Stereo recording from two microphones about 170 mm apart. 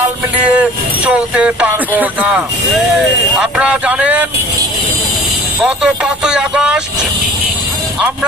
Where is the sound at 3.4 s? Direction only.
5° right (ahead or behind).